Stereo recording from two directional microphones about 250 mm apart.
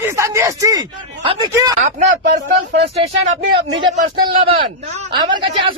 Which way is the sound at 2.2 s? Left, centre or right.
Right.